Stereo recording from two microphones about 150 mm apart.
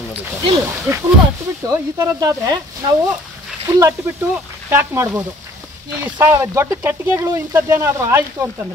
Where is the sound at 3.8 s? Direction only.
20° right (ahead or behind).